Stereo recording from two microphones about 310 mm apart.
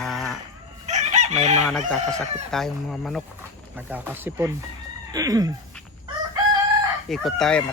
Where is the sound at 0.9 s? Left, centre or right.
Right.